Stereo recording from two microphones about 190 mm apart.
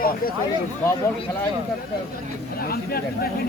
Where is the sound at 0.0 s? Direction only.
50° left (ahead or behind).